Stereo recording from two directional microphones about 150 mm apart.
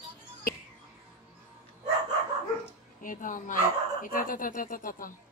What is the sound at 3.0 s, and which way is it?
Speech, 65° left (ahead or behind).